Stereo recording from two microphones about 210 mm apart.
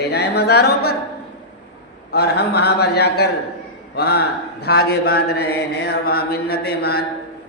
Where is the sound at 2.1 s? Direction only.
50° left (ahead or behind).